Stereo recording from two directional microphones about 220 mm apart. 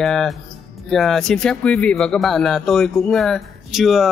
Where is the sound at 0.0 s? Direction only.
Centre (ahead or behind).